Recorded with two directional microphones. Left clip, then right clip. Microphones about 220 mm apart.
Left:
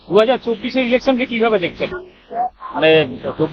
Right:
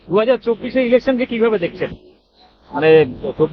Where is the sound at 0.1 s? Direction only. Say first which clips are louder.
Left 1 dB; 25° right (ahead or behind).